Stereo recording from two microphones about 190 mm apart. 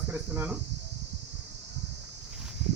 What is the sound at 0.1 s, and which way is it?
Speech, 10° right (ahead or behind).